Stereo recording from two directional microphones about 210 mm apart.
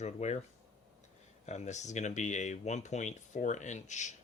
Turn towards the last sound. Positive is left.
turn(degrees=35)  # may be behind; listen again after turning